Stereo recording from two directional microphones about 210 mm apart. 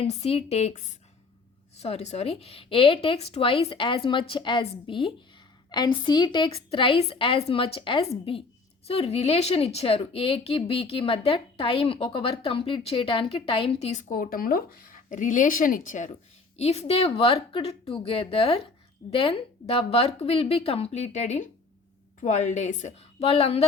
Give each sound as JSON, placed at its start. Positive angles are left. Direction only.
{"t": 0.0, "sound": "a woman's voice", "side_deg": 30}